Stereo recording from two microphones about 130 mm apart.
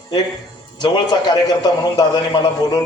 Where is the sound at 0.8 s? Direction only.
35° left (ahead or behind).